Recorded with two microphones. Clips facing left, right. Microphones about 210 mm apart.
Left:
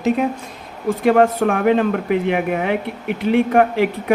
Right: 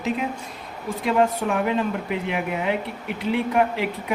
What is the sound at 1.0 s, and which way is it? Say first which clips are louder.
A man's voice: left 6 dB; 55° left (ahead or behind).